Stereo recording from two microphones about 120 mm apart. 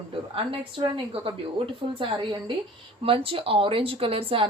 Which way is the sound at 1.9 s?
45° right (ahead or behind).